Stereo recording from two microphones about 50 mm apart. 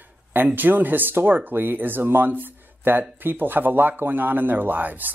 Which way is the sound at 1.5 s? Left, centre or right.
Right.